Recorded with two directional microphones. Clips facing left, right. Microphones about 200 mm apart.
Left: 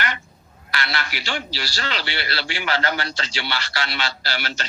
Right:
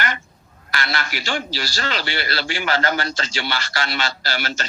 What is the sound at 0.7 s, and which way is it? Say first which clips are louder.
A man's voice: right 2 dB; 45° right (ahead or behind).